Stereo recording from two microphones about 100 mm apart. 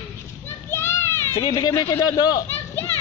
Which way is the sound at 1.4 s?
40° left (ahead or behind).